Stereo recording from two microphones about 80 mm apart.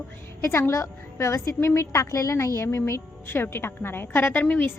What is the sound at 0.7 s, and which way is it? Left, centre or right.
A woman's voice, left.